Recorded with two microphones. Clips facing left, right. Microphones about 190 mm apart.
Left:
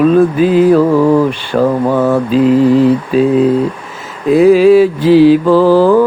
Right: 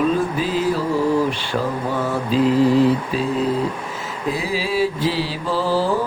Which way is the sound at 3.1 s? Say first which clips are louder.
Left 12 dB; 55° left (ahead or behind).